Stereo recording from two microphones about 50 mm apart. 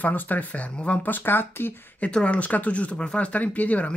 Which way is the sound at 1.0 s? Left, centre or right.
Left.